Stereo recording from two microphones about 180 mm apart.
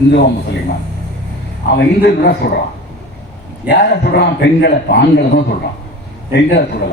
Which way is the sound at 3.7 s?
70° left (ahead or behind).